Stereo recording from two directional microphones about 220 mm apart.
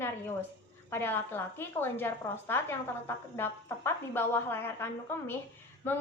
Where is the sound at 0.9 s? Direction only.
10° left (ahead or behind).